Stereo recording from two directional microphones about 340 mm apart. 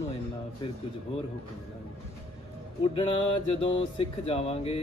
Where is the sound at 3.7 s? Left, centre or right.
Centre.